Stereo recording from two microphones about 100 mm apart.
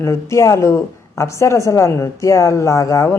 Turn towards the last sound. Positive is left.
turn(degrees=30)  # may be behind; listen again after turning